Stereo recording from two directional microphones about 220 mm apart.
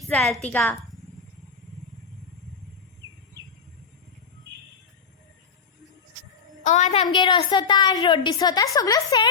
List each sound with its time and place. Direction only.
0.1 s a woman's voice: 5° left (ahead or behind)
6.7 s a woman's voice: 30° left (ahead or behind)
7.1 s a woman's voice: 20° left (ahead or behind)